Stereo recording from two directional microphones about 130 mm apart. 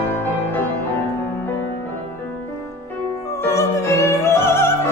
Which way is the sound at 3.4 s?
20° left (ahead or behind).